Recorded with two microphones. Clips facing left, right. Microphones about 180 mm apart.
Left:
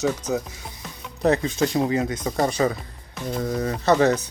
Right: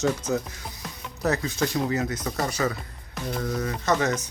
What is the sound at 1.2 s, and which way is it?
Speech, 25° left (ahead or behind).